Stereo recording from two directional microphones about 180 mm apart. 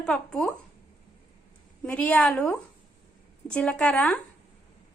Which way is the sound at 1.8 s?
5° left (ahead or behind).